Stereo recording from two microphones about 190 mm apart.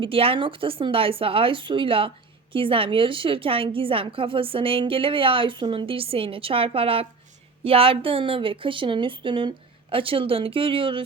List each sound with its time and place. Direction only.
0.0 s speech: 30° right (ahead or behind)